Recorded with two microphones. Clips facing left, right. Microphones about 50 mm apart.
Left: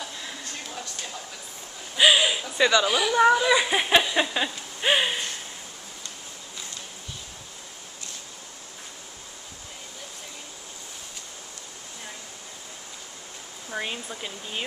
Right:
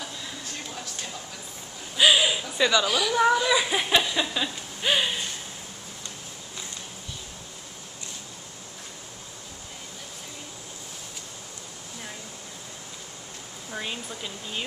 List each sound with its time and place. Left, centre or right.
0.2 s a sound: centre
2.0 s speech: centre
13.7 s speech: centre